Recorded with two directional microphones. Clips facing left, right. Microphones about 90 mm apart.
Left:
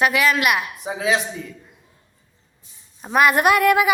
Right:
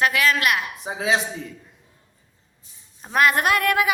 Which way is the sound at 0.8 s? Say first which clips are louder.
Left 1 dB; 25° right (ahead or behind).